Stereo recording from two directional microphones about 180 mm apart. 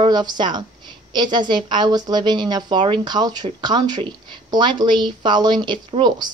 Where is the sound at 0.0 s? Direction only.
25° right (ahead or behind).